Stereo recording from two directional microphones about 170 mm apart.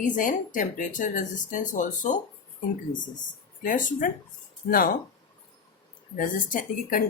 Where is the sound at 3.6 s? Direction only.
50° left (ahead or behind).